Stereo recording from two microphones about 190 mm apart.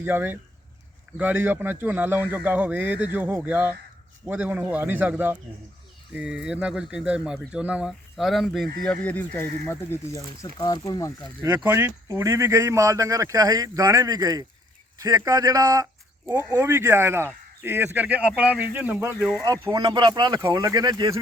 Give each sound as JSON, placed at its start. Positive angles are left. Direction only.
{"t": 0.0, "sound": "speech", "side_deg": -10}
{"t": 11.4, "sound": "speech", "side_deg": -10}
{"t": 19.5, "sound": "speech", "side_deg": -20}